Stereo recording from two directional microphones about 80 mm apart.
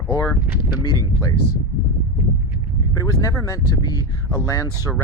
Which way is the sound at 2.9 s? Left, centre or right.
Left.